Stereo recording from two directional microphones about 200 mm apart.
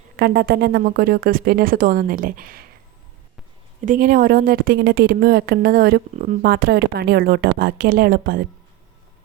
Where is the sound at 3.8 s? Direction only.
40° right (ahead or behind).